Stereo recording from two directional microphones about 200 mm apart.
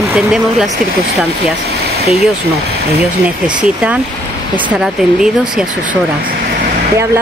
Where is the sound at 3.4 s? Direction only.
5° right (ahead or behind).